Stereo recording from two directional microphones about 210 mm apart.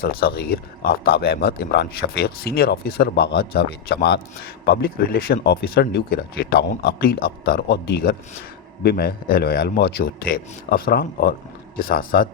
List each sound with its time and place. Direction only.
0.0 s a man's voice: 45° left (ahead or behind)